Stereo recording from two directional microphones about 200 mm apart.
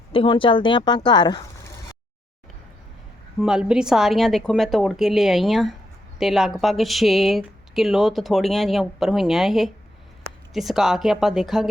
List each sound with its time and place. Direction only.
0.1 s speech: 25° left (ahead or behind)
3.4 s speech: 5° right (ahead or behind)